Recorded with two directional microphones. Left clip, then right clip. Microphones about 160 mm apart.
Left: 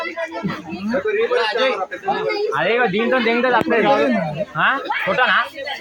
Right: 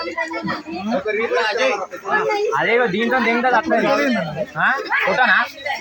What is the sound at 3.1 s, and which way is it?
Speech, 60° left (ahead or behind).